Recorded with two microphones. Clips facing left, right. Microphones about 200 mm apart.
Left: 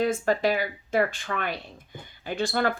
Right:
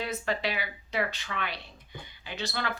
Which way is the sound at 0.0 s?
45° left (ahead or behind).